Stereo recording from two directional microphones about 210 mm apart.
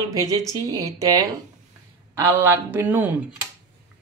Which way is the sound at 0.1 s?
15° right (ahead or behind).